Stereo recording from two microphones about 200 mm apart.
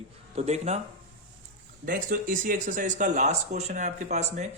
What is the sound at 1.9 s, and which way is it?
Speech, 45° right (ahead or behind).